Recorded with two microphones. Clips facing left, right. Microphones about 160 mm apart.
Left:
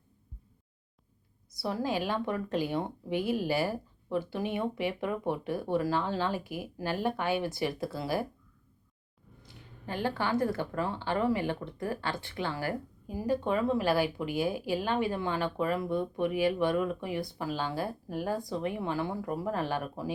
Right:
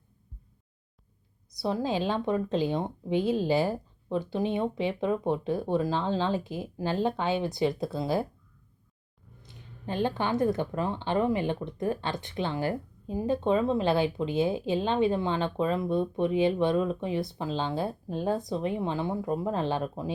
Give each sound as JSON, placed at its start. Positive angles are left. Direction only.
{"t": 1.5, "sound": "speech", "side_deg": -20}
{"t": 9.4, "sound": "speech", "side_deg": -20}